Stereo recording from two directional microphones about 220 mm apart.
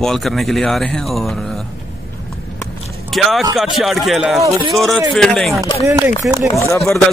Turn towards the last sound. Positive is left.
turn(degrees=10)  # may be behind; listen again after turning